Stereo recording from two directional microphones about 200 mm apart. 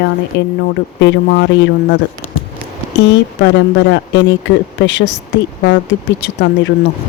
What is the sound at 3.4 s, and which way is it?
Speech, 65° left (ahead or behind).